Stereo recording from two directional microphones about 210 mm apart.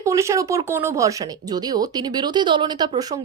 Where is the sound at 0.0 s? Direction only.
15° right (ahead or behind).